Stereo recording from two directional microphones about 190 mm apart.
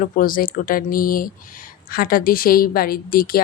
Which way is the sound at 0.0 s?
45° left (ahead or behind).